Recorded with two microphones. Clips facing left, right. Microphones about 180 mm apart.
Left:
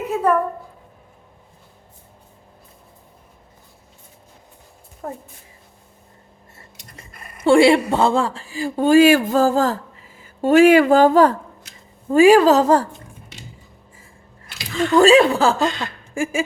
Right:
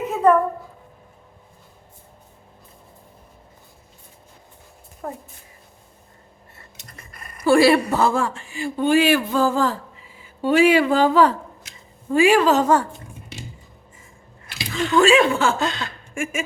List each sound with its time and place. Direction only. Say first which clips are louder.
0.1 s a sound: right 2 dB; centre (ahead or behind)
6.6 s a woman's voice: left 1 dB; 25° left (ahead or behind)
14.9 s a woman's voice: left 4 dB; 35° left (ahead or behind)